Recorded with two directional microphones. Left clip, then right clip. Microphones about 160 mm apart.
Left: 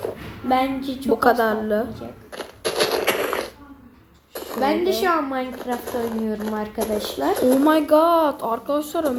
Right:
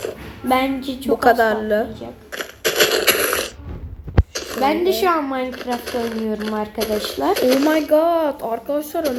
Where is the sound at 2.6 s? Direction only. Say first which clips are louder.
Right 4 dB; 85° right.